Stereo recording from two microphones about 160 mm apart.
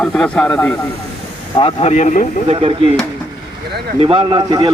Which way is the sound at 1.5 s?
40° left (ahead or behind).